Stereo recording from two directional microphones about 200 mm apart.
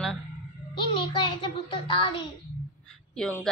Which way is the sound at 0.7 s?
25° left (ahead or behind).